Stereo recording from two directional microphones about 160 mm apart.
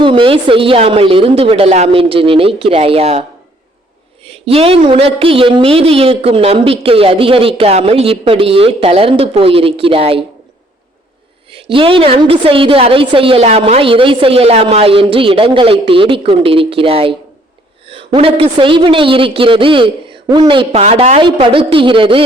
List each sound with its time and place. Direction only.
0.0 s speech: 35° right (ahead or behind)
4.3 s speech: 40° right (ahead or behind)
11.5 s speech: 35° right (ahead or behind)
20.8 s speech: 45° right (ahead or behind)